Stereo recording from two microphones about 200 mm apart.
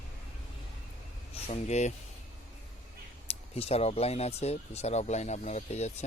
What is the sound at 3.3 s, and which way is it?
Speech, 30° left (ahead or behind).